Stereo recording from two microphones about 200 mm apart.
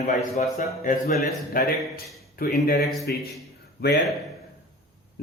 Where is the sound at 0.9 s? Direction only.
50° left (ahead or behind).